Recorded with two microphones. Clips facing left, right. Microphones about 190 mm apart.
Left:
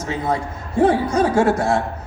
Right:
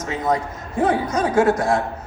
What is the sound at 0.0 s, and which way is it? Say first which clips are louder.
A man's voice: right 1 dB; 30° left (ahead or behind).